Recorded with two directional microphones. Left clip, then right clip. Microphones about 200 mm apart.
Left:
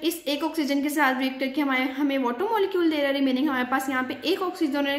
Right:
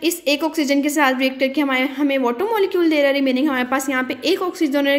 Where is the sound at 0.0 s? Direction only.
30° right (ahead or behind).